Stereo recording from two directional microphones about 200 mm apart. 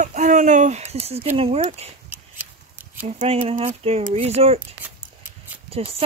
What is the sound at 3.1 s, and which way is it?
Speech, 30° right (ahead or behind).